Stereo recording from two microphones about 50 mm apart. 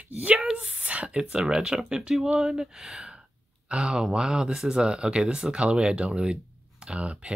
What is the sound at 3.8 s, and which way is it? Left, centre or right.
Speech, centre.